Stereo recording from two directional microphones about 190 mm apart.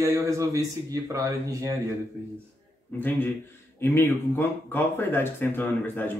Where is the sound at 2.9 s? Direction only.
10° left (ahead or behind).